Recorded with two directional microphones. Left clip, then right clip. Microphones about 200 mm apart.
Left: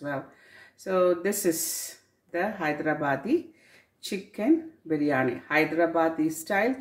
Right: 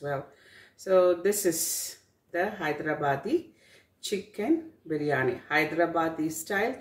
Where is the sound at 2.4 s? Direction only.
40° left (ahead or behind).